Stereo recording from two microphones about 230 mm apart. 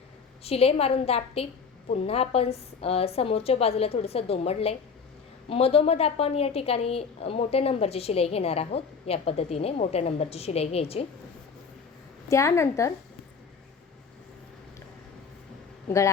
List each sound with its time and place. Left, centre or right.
0.4 s a woman's voice: left
12.3 s a woman's voice: centre
15.9 s a woman's voice: centre